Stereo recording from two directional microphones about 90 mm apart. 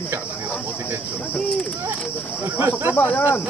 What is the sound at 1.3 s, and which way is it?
Speech, 10° left (ahead or behind).